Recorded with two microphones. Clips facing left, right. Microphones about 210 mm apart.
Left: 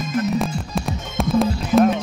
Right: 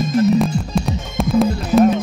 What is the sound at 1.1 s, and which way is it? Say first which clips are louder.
Music: right 3 dB; centre (ahead or behind).